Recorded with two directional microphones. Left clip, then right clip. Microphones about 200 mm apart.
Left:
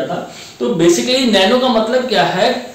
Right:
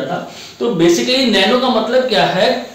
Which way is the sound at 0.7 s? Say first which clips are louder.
Even; 15° left (ahead or behind).